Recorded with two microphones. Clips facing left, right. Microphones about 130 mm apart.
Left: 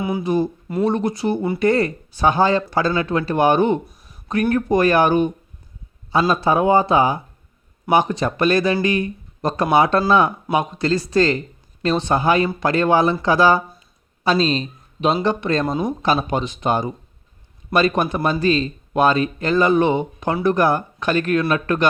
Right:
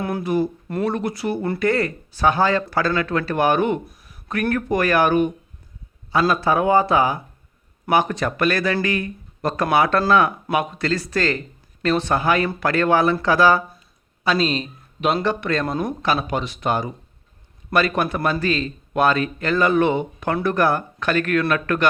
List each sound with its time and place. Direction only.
0.2 s speech: 20° left (ahead or behind)
14.3 s speech: 30° left (ahead or behind)
15.6 s speech: 15° left (ahead or behind)
16.0 s speech: 25° left (ahead or behind)